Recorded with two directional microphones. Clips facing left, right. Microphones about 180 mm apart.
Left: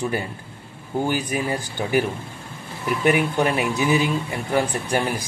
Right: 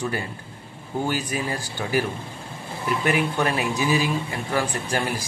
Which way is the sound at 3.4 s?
20° left (ahead or behind).